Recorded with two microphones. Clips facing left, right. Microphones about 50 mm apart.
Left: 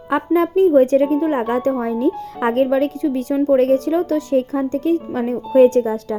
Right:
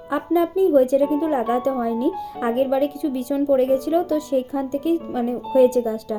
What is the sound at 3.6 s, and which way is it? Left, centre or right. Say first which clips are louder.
A woman's voice: left 3 dB; left.